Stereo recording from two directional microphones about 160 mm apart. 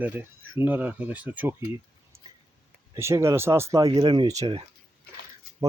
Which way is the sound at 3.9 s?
30° right (ahead or behind).